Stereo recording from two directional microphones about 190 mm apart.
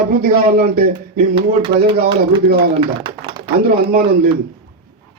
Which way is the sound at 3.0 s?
25° right (ahead or behind).